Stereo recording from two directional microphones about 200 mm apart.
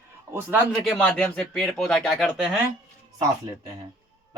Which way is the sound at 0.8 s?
Centre (ahead or behind).